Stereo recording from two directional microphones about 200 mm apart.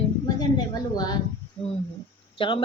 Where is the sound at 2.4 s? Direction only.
25° left (ahead or behind).